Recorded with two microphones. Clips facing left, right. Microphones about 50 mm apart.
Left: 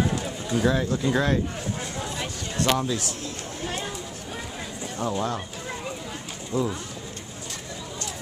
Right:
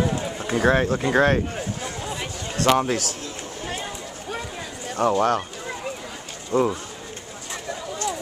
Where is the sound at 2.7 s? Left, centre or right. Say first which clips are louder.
Right 5 dB; right.